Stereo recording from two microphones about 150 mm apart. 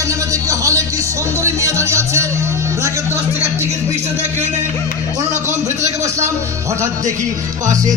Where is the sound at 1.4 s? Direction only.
20° right (ahead or behind).